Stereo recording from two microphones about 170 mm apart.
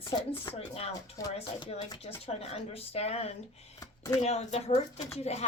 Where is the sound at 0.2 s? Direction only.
30° left (ahead or behind).